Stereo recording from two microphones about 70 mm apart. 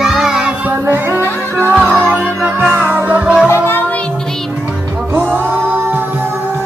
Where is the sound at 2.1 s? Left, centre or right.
Right.